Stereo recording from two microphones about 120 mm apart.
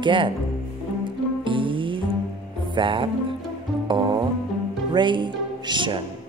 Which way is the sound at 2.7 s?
45° right (ahead or behind).